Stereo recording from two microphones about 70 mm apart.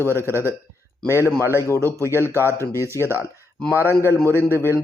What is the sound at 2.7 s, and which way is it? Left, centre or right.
Speech, right.